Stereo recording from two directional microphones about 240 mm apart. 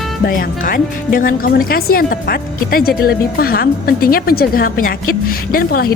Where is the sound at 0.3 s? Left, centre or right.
Left.